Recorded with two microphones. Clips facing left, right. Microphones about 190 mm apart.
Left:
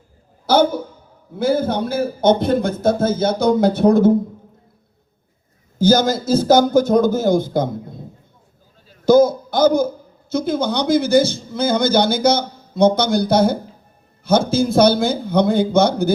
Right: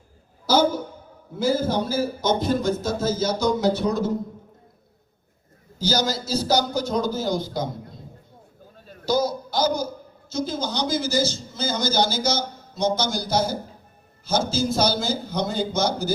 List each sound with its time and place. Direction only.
0.4 s a sound: 55° left (ahead or behind)
1.4 s speech: 60° left (ahead or behind)
5.8 s a man's voice: 50° left (ahead or behind)
9.0 s a man's voice: 50° left (ahead or behind)